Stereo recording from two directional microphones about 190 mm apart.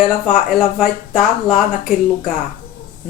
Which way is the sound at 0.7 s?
5° right (ahead or behind).